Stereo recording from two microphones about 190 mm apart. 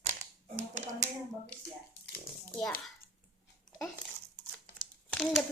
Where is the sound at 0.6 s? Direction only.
40° right (ahead or behind).